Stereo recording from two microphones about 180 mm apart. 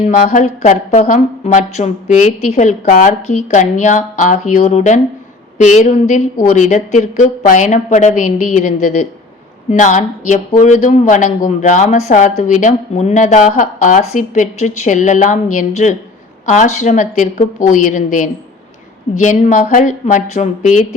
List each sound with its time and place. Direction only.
0.0 s speech: 45° left (ahead or behind)